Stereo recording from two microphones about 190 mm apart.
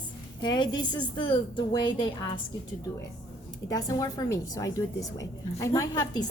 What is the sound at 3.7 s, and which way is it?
A woman's voice, 20° left (ahead or behind).